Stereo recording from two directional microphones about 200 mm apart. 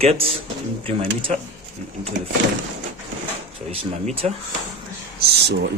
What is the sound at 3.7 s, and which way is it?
Speech, 30° right (ahead or behind).